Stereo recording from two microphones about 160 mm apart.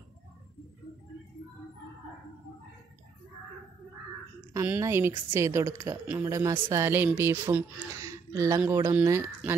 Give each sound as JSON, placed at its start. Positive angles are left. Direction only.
{"t": 4.6, "sound": "a woman's voice", "side_deg": -15}